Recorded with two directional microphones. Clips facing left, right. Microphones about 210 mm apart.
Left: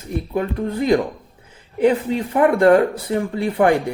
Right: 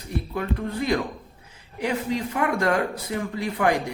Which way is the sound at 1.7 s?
30° left (ahead or behind).